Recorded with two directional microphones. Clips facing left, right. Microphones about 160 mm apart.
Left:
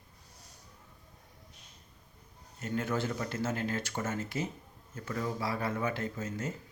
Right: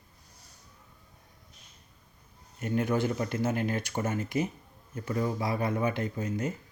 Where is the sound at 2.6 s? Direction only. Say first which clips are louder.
Right 5 dB; 15° right (ahead or behind).